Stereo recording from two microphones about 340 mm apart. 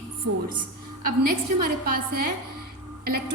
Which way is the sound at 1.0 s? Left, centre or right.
Right.